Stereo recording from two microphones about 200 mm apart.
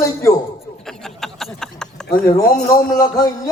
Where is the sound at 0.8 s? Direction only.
Centre (ahead or behind).